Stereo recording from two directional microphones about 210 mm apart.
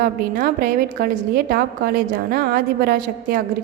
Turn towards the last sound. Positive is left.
turn(degrees=-45)  # may be behind; listen again after turning